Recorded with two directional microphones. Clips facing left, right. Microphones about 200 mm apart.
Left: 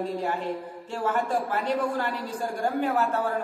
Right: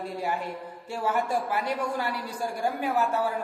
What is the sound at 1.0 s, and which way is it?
A man's voice, 10° right (ahead or behind).